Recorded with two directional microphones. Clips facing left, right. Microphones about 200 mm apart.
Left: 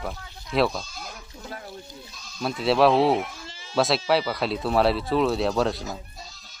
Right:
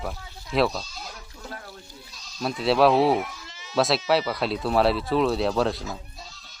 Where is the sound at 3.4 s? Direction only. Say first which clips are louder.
Left 3 dB; 30° left (ahead or behind).